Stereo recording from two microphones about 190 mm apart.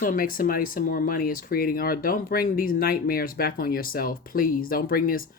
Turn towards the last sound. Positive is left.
turn(degrees=50)  # may be behind; listen again after turning